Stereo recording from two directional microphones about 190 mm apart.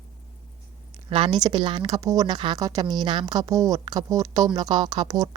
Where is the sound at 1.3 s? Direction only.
20° right (ahead or behind).